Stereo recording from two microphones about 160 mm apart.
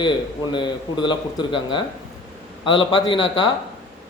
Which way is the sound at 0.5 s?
30° left (ahead or behind).